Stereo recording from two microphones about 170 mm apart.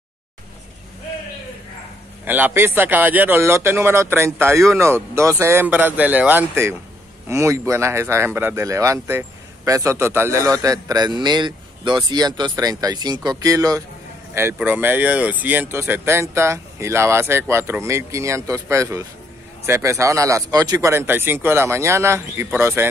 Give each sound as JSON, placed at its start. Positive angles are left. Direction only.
{"t": 2.2, "sound": "a man's voice", "side_deg": -10}